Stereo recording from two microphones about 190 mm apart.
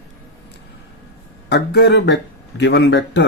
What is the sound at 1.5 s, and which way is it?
Speech, 65° left (ahead or behind).